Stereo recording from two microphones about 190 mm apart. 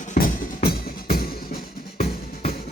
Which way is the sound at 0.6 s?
50° left (ahead or behind).